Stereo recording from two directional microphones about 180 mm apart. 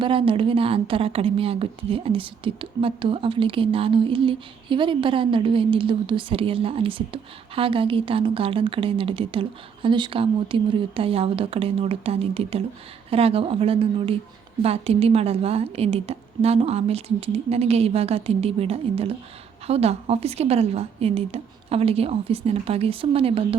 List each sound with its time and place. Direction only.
0.0 s a woman's voice: 30° right (ahead or behind)